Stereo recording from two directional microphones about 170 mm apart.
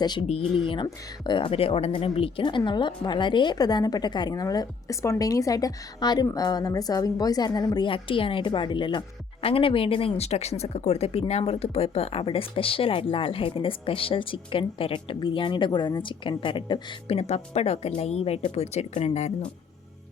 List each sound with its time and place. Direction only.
0.0 s a woman's voice: 25° left (ahead or behind)